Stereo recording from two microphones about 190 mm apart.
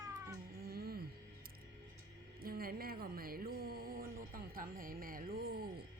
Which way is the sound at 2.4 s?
50° right (ahead or behind).